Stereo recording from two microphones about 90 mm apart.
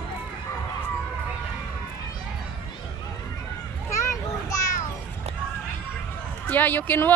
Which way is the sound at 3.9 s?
35° left (ahead or behind).